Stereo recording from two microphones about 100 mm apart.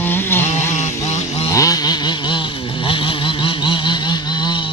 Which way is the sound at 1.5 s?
35° left (ahead or behind).